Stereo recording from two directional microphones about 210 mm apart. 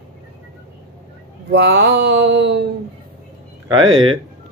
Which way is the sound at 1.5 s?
55° right (ahead or behind).